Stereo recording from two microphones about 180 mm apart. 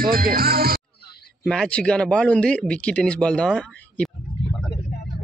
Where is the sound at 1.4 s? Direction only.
5° left (ahead or behind).